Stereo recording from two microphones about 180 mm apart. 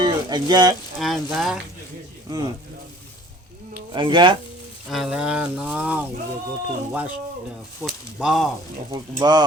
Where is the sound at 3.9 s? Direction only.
25° right (ahead or behind).